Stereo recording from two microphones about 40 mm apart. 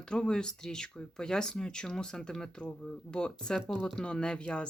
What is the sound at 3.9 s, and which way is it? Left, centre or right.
Speech, left.